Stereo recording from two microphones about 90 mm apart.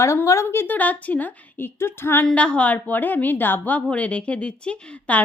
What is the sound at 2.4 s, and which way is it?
A woman's voice, 15° left (ahead or behind).